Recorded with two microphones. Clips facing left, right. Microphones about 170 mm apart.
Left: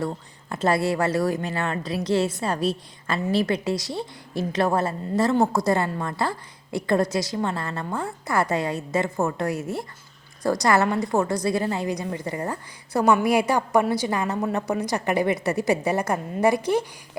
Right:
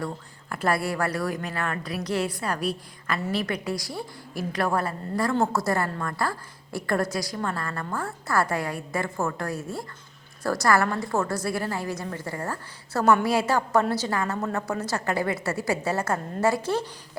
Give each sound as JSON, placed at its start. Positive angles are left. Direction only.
{"t": 0.5, "sound": "a woman's voice", "side_deg": 25}